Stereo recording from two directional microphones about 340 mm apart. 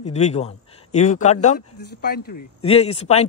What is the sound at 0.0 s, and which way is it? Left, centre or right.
Speech, centre.